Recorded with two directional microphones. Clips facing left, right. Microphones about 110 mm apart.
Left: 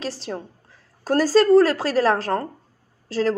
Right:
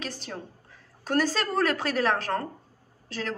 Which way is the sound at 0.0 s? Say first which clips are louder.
Left 7 dB; 30° left (ahead or behind).